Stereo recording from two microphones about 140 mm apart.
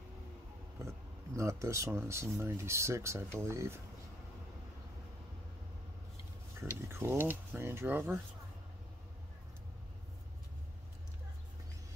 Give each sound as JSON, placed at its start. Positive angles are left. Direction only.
{"t": 0.7, "sound": "speech", "side_deg": -20}
{"t": 6.6, "sound": "speech", "side_deg": -15}